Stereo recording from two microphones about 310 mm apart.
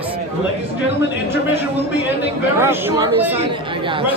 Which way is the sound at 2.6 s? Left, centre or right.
Centre.